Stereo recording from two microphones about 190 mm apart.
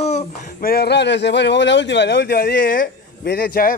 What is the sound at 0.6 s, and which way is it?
Speech, 55° left (ahead or behind).